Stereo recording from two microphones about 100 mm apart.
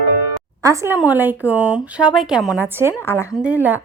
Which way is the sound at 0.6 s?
35° right (ahead or behind).